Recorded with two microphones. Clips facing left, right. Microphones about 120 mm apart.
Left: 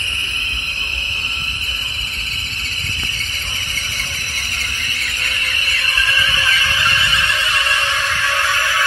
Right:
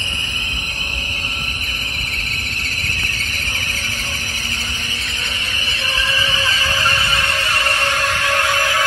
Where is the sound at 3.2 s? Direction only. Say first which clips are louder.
Right 3 dB; 15° left (ahead or behind).